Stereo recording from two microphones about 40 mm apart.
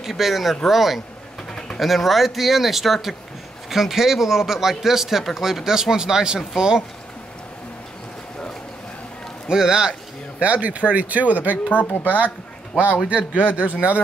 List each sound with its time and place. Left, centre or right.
0.0 s a man's voice: centre
9.5 s a man's voice: centre
10.4 s speech: right
11.7 s speech: left
13.3 s speech: right